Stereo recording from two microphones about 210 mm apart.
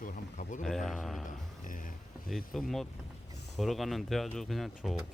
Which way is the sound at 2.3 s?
Centre (ahead or behind).